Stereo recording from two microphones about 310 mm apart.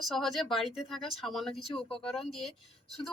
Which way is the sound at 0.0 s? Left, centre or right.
Centre.